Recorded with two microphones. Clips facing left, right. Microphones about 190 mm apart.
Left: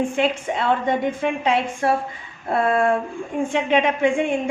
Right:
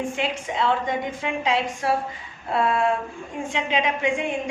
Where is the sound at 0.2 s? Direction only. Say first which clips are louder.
Left 4 dB; 55° left (ahead or behind).